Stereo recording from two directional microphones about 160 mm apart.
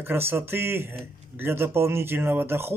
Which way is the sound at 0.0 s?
15° right (ahead or behind).